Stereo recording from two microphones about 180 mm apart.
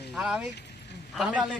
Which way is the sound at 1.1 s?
5° right (ahead or behind).